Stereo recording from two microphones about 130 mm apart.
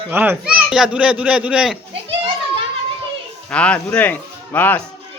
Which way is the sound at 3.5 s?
10° left (ahead or behind).